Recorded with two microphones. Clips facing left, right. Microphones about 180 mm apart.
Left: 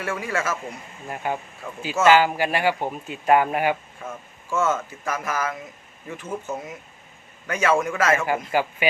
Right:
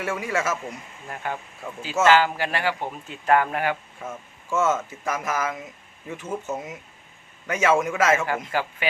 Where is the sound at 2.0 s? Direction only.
15° left (ahead or behind).